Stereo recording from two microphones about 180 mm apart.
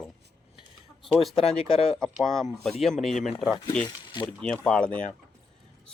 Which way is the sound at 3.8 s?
25° left (ahead or behind).